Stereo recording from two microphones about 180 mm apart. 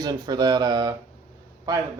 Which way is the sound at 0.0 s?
20° right (ahead or behind).